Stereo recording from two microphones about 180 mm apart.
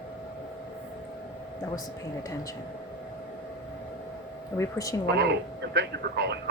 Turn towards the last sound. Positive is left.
turn(degrees=-70)  # may be behind; listen again after turning